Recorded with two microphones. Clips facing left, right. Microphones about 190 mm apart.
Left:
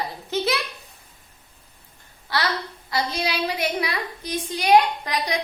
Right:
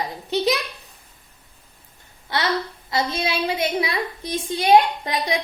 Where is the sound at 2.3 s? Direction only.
20° right (ahead or behind).